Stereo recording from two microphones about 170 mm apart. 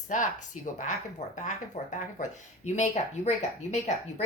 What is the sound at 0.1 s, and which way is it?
A woman's voice, 50° left (ahead or behind).